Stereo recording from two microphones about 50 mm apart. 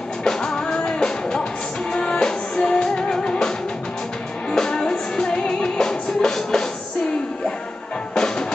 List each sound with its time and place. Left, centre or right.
0.2 s music: centre
8.1 s music: centre